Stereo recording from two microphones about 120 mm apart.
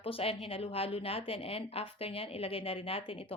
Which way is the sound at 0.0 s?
50° left (ahead or behind).